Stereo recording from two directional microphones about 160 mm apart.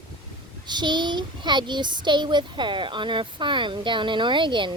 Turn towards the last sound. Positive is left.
turn(degrees=-30)  # may be behind; listen again after turning